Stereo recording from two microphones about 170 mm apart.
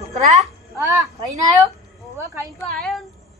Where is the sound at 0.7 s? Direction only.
20° right (ahead or behind).